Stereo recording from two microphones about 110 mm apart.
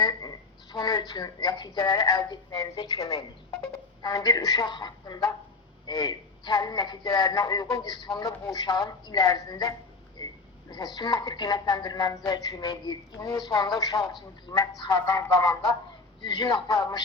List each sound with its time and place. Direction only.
0.0 s a woman's voice: 35° left (ahead or behind)
16.2 s a man's voice: 45° left (ahead or behind)